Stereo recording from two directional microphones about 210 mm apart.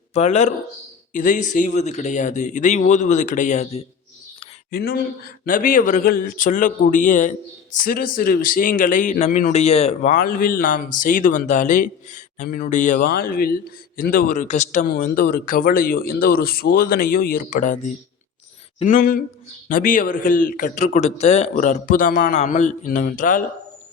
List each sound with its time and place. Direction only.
0.1 s a man's voice: 30° left (ahead or behind)
4.7 s a man's voice: 45° left (ahead or behind)